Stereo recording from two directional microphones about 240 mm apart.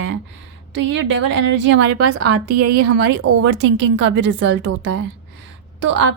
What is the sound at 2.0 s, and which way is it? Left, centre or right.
Speech, right.